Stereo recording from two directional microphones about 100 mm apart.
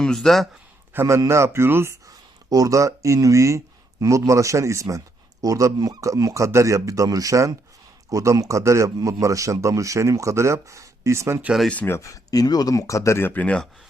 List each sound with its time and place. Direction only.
0.0 s speech: 5° left (ahead or behind)
0.9 s a man's voice: 30° right (ahead or behind)
11.7 s speech: 15° left (ahead or behind)
11.9 s speech: 35° left (ahead or behind); by 13.6 s 15° left (ahead or behind)